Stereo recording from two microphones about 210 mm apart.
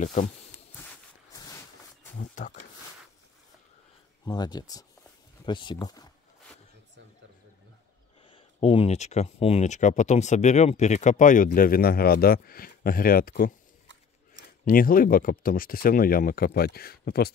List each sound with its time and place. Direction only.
0.0 s speech: 35° left (ahead or behind)
0.7 s a sound: 10° left (ahead or behind)
2.1 s speech: 35° left (ahead or behind)
4.3 s speech: 20° left (ahead or behind)
8.3 s speech: 25° left (ahead or behind); by 13.5 s 45° left (ahead or behind)
14.6 s speech: 40° left (ahead or behind)